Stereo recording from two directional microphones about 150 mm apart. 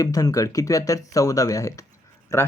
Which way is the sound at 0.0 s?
25° left (ahead or behind).